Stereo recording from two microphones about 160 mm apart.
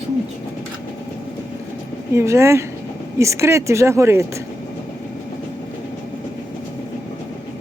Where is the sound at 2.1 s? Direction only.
15° right (ahead or behind).